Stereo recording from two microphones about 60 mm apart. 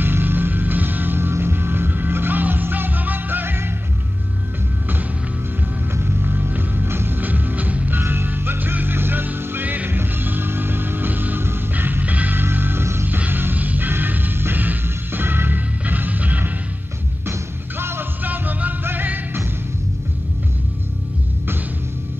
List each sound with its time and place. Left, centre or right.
0.0 s music: right
5.9 s music: right
8.0 s music: right
17.3 s music: right